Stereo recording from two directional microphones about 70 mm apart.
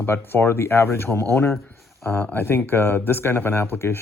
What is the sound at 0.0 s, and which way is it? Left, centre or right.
Speech, left.